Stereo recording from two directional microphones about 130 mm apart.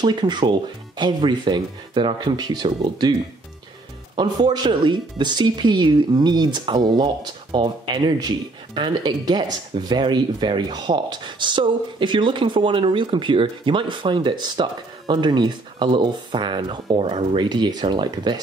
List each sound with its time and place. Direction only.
0.0 s speech: 35° right (ahead or behind)
4.2 s speech: 35° right (ahead or behind)